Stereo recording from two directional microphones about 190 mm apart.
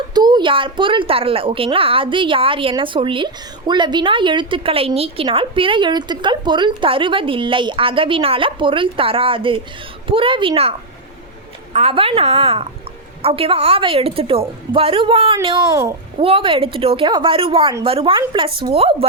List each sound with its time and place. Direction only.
0.1 s a woman's voice: 20° right (ahead or behind)
15.7 s a child's voice: 15° right (ahead or behind)
16.1 s a woman's voice: 30° right (ahead or behind)